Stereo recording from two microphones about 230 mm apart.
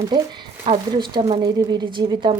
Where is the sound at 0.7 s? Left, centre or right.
Centre.